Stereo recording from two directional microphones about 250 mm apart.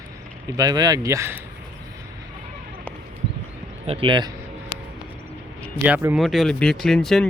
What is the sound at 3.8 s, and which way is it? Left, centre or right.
Speech, right.